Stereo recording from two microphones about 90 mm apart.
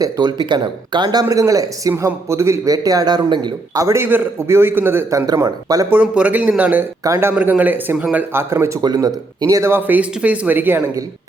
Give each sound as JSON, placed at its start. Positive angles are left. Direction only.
{"t": 0.0, "sound": "speech", "side_deg": -50}
{"t": 1.2, "sound": "speech", "side_deg": -40}
{"t": 1.9, "sound": "speech", "side_deg": -30}
{"t": 3.8, "sound": "a man's voice", "side_deg": -30}
{"t": 5.6, "sound": "speech", "side_deg": -45}
{"t": 5.9, "sound": "a man's voice", "side_deg": -15}
{"t": 9.0, "sound": "speech", "side_deg": -40}